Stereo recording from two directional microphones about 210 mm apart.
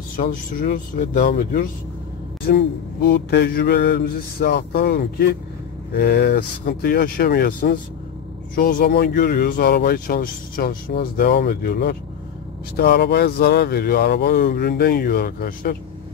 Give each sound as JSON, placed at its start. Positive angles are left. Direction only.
{"t": 0.2, "sound": "speech", "side_deg": 40}